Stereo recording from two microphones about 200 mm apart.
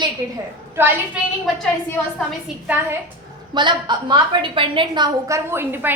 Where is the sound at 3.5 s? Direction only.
20° right (ahead or behind).